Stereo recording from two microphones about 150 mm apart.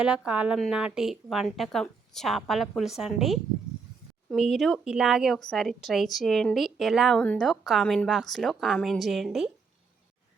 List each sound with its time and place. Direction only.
0.0 s a woman's voice: 5° right (ahead or behind)